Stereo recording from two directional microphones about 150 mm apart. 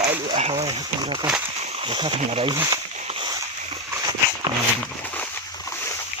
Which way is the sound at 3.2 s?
25° right (ahead or behind).